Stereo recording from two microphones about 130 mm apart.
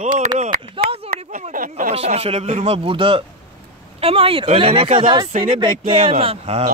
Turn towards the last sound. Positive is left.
turn(degrees=-50)  # may be behind; listen again after turning